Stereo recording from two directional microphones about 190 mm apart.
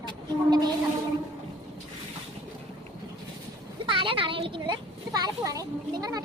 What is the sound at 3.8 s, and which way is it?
A child's voice, 25° right (ahead or behind).